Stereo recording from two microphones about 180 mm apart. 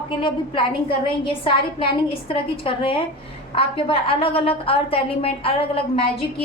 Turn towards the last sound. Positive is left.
turn(degrees=30)  # may be behind; listen again after turning